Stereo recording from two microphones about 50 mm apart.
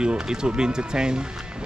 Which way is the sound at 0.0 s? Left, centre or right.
Centre.